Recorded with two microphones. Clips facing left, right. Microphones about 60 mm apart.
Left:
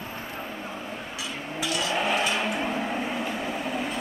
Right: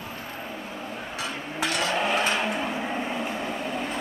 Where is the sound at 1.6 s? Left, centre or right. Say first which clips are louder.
Right 2 dB; right.